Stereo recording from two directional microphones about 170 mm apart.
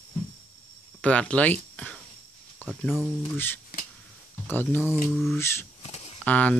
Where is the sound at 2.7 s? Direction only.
5° right (ahead or behind).